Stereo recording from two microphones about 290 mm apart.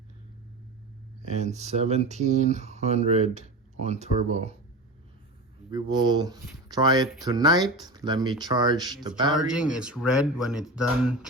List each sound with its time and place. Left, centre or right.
1.2 s speech: right
5.7 s speech: centre
9.5 s speech: centre